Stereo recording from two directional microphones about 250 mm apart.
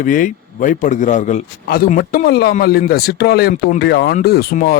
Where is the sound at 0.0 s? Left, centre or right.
Left.